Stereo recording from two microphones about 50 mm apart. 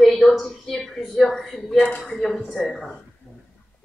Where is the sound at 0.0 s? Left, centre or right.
Centre.